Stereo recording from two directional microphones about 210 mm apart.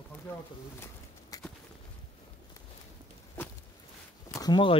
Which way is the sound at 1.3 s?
15° left (ahead or behind).